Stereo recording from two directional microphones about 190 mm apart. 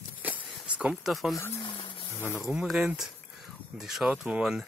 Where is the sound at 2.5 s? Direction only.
5° right (ahead or behind).